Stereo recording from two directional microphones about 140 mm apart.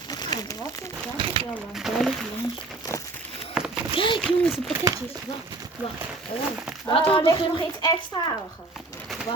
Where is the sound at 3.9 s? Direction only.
35° left (ahead or behind).